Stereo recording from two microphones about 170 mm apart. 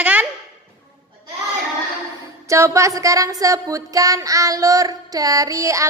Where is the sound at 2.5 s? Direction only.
15° right (ahead or behind).